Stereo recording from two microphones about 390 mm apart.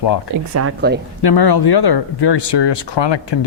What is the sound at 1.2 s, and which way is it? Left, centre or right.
Speech, left.